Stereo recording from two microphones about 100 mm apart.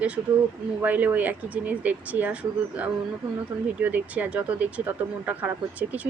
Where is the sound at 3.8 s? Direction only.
15° right (ahead or behind).